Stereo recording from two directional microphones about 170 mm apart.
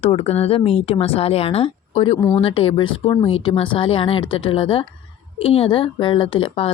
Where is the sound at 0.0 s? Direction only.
35° left (ahead or behind).